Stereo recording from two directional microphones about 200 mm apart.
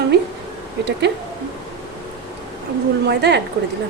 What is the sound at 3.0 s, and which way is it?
Speech, 60° right (ahead or behind).